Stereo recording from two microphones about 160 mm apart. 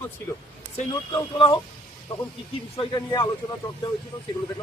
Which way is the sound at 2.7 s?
30° left (ahead or behind).